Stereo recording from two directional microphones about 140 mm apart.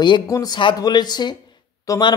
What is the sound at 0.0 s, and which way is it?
Speech, 30° left (ahead or behind).